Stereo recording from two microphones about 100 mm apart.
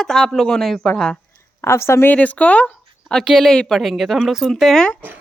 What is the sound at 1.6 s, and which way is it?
Speech, 25° left (ahead or behind).